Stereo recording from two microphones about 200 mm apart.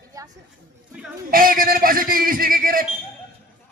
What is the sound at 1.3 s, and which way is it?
A man's voice, 45° right (ahead or behind).